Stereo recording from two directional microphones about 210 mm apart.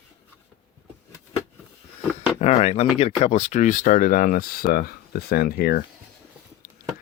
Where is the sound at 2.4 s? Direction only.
30° left (ahead or behind).